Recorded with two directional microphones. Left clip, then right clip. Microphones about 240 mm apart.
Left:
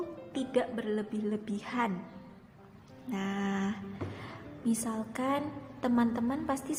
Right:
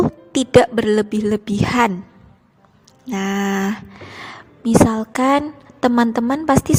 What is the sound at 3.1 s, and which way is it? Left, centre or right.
Speech, right.